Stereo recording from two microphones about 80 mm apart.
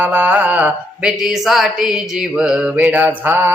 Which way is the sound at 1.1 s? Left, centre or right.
Centre.